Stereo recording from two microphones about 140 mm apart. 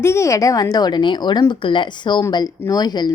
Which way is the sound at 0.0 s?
20° left (ahead or behind).